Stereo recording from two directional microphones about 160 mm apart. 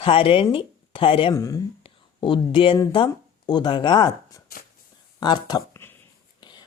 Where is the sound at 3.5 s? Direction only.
30° left (ahead or behind).